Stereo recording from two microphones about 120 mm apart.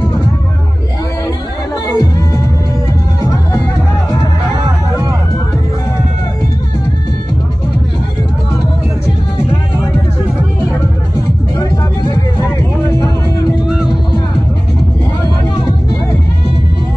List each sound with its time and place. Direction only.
1.9 s music: 30° left (ahead or behind)
13.7 s music: 5° right (ahead or behind)